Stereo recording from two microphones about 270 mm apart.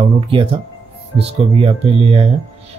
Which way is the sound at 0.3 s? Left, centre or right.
Centre.